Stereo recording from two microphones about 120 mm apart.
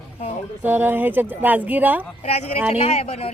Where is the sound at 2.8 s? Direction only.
60° left (ahead or behind).